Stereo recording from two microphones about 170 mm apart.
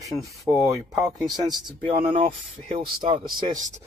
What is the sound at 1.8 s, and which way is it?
Speech, 35° right (ahead or behind).